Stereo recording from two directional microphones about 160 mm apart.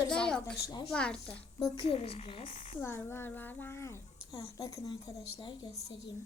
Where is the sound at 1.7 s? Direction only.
40° left (ahead or behind).